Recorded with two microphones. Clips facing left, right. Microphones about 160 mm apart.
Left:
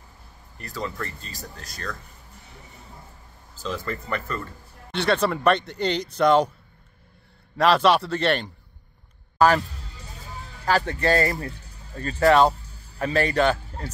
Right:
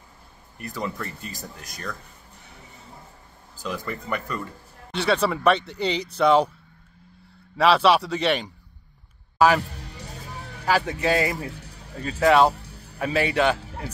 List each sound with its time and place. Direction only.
0.6 s speech: 15° right (ahead or behind)
3.6 s speech: 10° right (ahead or behind)
7.5 s speech: 5° right (ahead or behind)
9.8 s music: 70° right (ahead or behind)
10.6 s speech: 5° right (ahead or behind)
11.6 s music: 75° right (ahead or behind)
11.9 s speech: 5° right (ahead or behind)
12.5 s music: 70° right (ahead or behind)
13.0 s speech: 5° right (ahead or behind)